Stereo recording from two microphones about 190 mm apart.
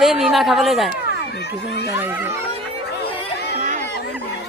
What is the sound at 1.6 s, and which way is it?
Speech, 60° left (ahead or behind).